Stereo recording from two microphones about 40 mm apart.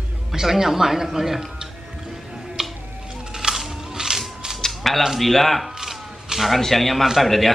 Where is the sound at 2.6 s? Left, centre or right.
Centre.